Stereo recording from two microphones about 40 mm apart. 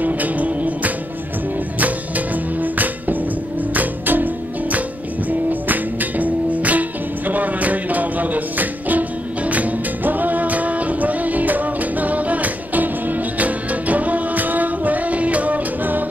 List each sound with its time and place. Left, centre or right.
0.0 s music: right